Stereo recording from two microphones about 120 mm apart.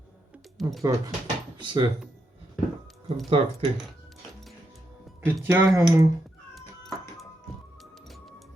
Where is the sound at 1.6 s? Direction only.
40° right (ahead or behind).